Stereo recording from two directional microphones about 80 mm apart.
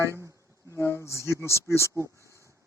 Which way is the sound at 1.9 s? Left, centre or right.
Right.